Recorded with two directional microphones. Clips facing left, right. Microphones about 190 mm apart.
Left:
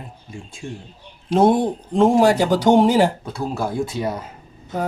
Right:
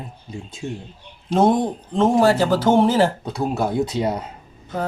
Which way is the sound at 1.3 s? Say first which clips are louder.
Left 1 dB; 10° left (ahead or behind).